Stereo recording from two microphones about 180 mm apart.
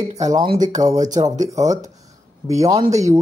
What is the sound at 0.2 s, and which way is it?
Speech, 25° right (ahead or behind).